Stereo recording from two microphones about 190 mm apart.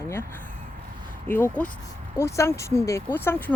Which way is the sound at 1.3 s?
10° left (ahead or behind).